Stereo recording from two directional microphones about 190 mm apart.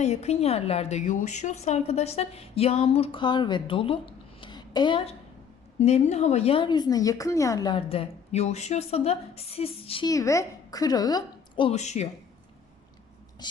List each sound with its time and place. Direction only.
0.0 s a woman's voice: 35° left (ahead or behind)
10.1 s a woman's voice: 15° left (ahead or behind); by 12.0 s 35° left (ahead or behind)
13.4 s a woman's voice: 20° left (ahead or behind)